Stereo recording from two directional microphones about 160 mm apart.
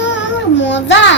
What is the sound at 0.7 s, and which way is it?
Speech, 90° left.